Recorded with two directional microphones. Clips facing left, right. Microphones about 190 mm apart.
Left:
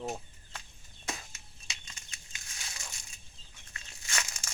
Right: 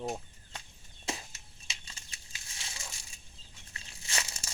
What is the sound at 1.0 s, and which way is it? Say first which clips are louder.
Bird flight: right 2 dB; 30° right (ahead or behind).